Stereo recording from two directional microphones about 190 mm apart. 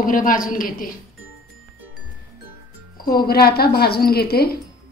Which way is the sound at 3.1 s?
55° left (ahead or behind).